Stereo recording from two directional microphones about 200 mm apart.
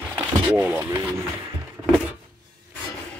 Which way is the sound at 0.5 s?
10° right (ahead or behind).